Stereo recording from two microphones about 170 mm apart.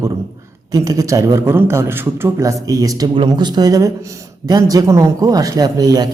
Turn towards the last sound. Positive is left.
turn(degrees=-20)  # may be behind; listen again after turning